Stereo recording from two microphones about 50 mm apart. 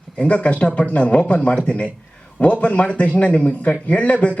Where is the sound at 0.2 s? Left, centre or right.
Left.